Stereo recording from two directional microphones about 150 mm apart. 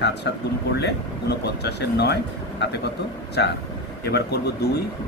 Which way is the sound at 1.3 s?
90° left.